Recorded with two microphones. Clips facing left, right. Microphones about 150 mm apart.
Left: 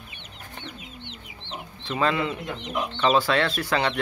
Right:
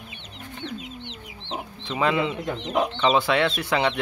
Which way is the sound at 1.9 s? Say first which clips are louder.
Right 1 dB; 15° right (ahead or behind).